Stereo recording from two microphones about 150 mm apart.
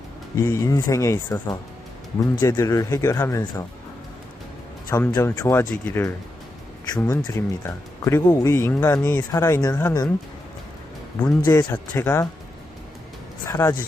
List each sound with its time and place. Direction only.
0.3 s speech: 20° left (ahead or behind)
4.9 s speech: 20° left (ahead or behind)
11.2 s speech: 15° left (ahead or behind)
13.5 s speech: 20° left (ahead or behind)